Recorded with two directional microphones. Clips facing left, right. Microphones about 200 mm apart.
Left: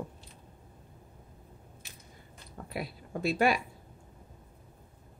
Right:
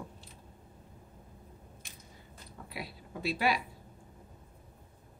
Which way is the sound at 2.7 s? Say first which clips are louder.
Left 6 dB; 50° left (ahead or behind).